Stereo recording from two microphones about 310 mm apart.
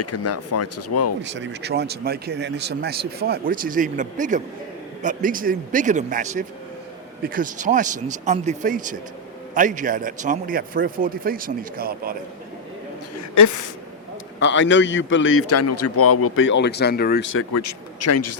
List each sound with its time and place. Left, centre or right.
0.0 s speech: left
1.2 s a man's voice: right
13.3 s a woman's voice: left
14.3 s a man's voice: left
17.5 s speech: left